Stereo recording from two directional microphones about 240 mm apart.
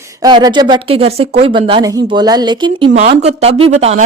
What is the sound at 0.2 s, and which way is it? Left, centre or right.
Speech, centre.